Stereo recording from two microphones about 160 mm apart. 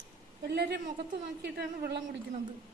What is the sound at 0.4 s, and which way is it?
A woman's voice, 90° right.